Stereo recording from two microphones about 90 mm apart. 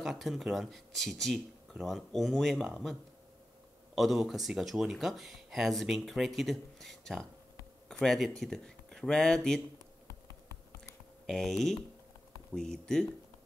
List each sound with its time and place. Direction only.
0.0 s speech: centre (ahead or behind)
11.2 s speech: centre (ahead or behind)